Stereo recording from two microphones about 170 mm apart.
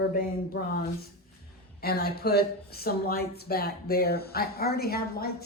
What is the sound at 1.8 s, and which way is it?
A woman's voice, 65° left (ahead or behind).